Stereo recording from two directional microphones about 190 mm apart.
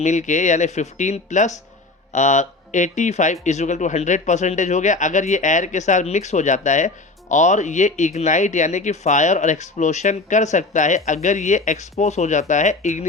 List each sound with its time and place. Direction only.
0.0 s speech: 40° left (ahead or behind)